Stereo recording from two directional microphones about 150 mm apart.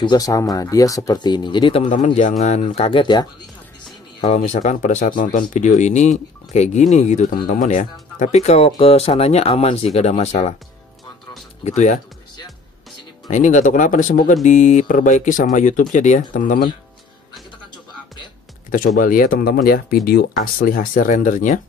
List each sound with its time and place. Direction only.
0.0 s speech: 25° left (ahead or behind)
2.1 s speech: 50° left (ahead or behind)
4.5 s speech: 50° left (ahead or behind)
11.6 s speech: 50° left (ahead or behind)
13.3 s speech: 55° left (ahead or behind)
18.9 s speech: 70° left (ahead or behind)